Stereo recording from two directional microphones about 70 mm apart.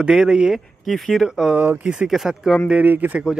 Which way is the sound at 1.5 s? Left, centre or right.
Right.